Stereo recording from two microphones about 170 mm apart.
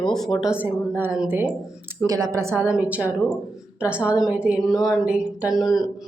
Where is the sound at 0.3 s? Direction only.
5° right (ahead or behind).